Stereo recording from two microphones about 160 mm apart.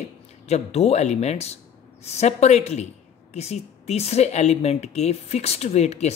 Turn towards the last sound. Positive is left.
turn(degrees=45)  # may be behind; listen again after turning